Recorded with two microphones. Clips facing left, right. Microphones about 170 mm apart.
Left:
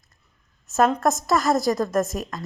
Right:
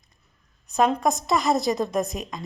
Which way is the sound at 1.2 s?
20° right (ahead or behind).